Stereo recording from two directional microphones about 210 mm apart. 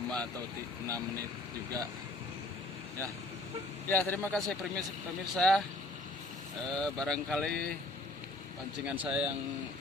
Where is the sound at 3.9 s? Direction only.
10° left (ahead or behind).